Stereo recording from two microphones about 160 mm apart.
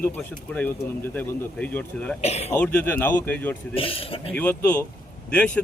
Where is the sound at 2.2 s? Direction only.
40° left (ahead or behind).